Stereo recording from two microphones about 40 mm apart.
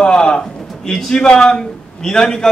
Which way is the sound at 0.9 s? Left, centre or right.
Centre.